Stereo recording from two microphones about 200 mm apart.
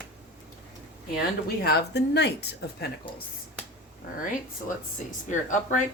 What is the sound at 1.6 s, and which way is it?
Speech, 55° left (ahead or behind).